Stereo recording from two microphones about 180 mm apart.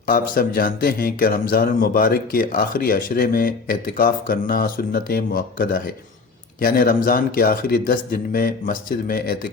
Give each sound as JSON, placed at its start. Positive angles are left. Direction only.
{"t": 0.0, "sound": "speech", "side_deg": 55}